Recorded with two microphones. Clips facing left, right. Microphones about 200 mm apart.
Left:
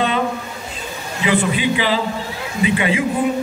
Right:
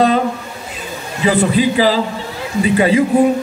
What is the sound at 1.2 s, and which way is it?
A man's voice, 40° right (ahead or behind).